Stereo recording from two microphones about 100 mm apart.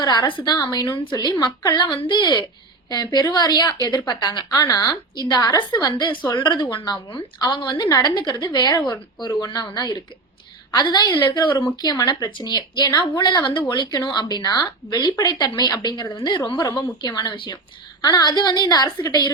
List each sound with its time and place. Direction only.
0.0 s speech: 50° left (ahead or behind)
0.6 s a woman's voice: 40° left (ahead or behind)
2.9 s a woman's voice: 45° left (ahead or behind)
18.0 s a woman's voice: 40° left (ahead or behind)